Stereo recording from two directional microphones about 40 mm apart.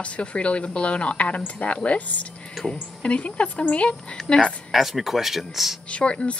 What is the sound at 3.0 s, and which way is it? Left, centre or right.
A woman's voice, left.